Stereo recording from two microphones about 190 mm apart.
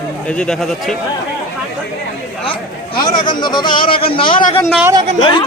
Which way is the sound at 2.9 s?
25° left (ahead or behind).